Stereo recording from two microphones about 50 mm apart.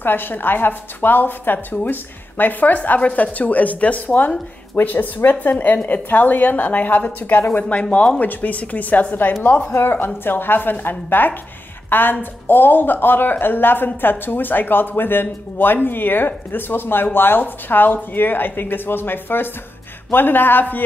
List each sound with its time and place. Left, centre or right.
0.0 s a woman's voice: left
7.9 s a woman's voice: left
9.7 s speech: left